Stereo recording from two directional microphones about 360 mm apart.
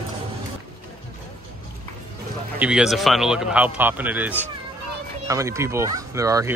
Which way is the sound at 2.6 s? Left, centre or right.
Centre.